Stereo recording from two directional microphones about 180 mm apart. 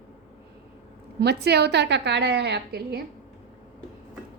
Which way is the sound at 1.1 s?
65° right (ahead or behind).